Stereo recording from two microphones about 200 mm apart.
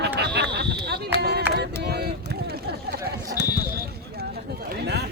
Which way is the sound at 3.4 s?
60° left (ahead or behind).